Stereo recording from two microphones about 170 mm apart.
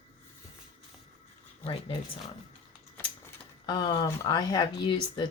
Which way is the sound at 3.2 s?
25° left (ahead or behind).